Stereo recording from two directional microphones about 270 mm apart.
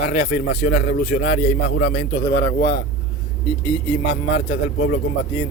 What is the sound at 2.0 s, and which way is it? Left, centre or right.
Speech, centre.